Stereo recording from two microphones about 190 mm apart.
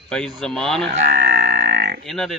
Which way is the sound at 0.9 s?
45° right (ahead or behind).